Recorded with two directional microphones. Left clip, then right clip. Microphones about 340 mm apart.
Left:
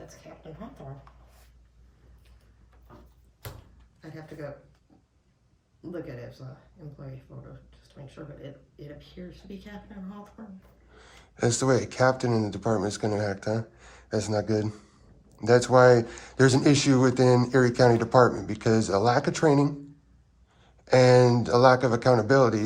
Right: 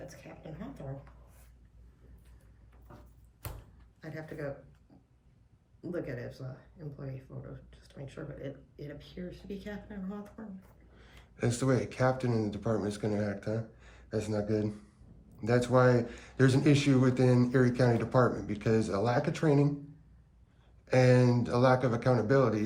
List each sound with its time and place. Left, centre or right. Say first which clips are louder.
4.0 s speech: even; centre
5.8 s speech: even; centre
7.7 s speech: right 1 dB; centre
10.9 s speech: left 7 dB; centre
20.8 s speech: left 7 dB; centre